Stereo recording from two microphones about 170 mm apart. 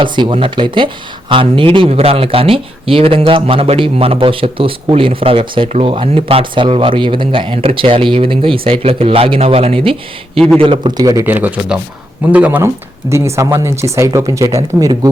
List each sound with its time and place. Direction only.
0.0 s a man's voice: 30° right (ahead or behind)